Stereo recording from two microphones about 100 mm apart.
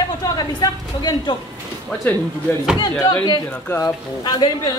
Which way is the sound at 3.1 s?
45° left (ahead or behind).